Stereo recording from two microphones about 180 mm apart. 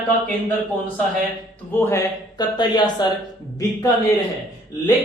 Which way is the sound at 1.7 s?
15° left (ahead or behind).